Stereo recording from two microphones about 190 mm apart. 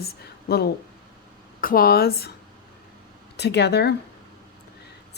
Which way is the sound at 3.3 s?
60° left (ahead or behind).